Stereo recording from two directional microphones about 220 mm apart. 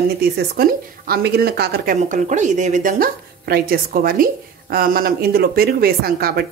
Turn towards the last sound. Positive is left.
turn(degrees=-45)  # may be behind; listen again after turning